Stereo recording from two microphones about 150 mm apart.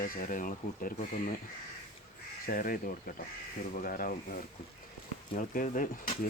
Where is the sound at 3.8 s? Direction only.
70° left (ahead or behind).